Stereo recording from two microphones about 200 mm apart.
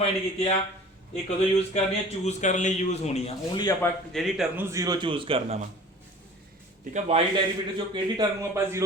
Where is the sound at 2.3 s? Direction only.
35° left (ahead or behind).